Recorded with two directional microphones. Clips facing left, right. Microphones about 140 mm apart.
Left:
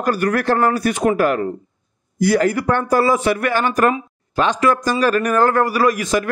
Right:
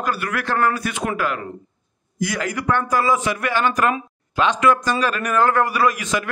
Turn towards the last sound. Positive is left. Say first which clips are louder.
# left 4 dB
turn(degrees=40)  # may be behind; listen again after turning